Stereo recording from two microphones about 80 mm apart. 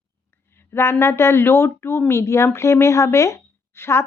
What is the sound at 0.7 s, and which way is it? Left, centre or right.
A woman's voice, left.